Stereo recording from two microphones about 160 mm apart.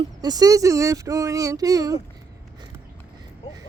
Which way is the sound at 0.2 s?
25° right (ahead or behind).